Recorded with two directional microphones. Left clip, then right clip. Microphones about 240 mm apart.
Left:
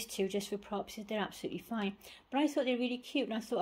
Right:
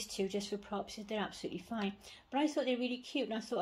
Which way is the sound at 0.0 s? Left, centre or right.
Left.